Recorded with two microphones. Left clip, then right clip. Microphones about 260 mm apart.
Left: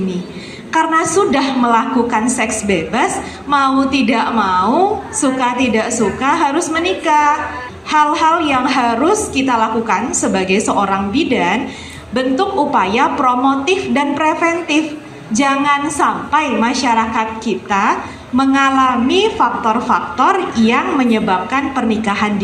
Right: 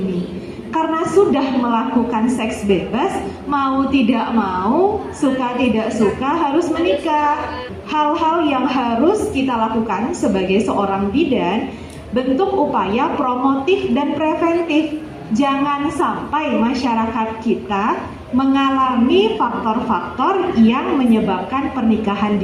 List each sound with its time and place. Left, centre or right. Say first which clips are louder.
0.7 s a woman's voice: left 4 dB; left
12.7 s a woman's voice: left 4 dB; left